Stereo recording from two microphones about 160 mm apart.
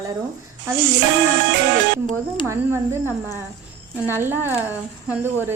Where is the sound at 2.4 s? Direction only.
15° right (ahead or behind).